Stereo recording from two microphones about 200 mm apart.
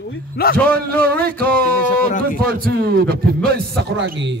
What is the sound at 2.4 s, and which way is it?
A man's voice, 50° right (ahead or behind).